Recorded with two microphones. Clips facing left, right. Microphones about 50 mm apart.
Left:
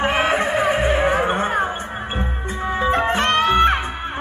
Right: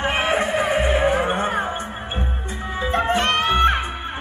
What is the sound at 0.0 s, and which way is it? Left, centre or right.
Music, left.